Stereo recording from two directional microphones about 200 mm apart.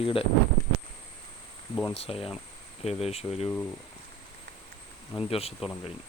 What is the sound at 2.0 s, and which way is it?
Speech, 30° left (ahead or behind).